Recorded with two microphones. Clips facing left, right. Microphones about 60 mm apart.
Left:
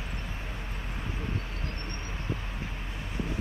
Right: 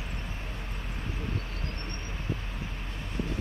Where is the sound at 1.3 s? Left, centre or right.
Left.